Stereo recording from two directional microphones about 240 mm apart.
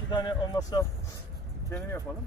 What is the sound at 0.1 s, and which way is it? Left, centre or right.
Speech, centre.